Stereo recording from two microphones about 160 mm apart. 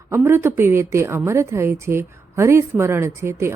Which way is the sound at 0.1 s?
15° right (ahead or behind).